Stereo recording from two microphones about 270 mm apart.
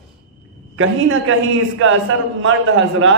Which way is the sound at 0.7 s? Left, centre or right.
Right.